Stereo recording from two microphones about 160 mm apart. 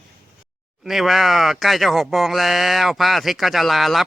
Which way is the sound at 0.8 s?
Centre (ahead or behind).